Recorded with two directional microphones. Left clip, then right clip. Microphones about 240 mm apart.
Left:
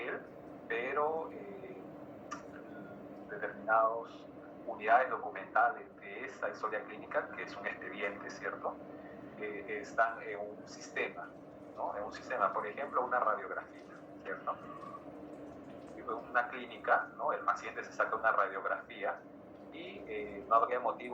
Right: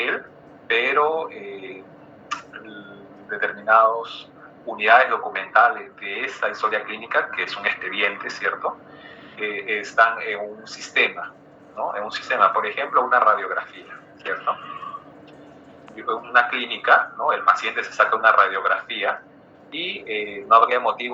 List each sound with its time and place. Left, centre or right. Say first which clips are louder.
0.7 s a sound: right 15 dB; right
3.2 s a man's voice: right 15 dB; right
16.0 s a man's voice: right 16 dB; right